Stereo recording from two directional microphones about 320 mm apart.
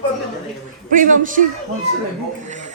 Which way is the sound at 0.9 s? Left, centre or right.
Right.